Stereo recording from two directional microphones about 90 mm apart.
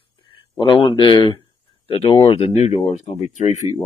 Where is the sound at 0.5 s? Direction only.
80° left.